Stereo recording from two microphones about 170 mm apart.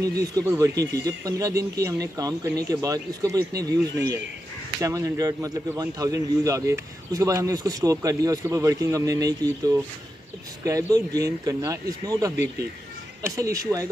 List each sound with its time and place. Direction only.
0.0 s speech: 20° right (ahead or behind)
4.7 s speech: 20° right (ahead or behind)
10.6 s speech: 20° right (ahead or behind)
13.4 s speech: 20° right (ahead or behind)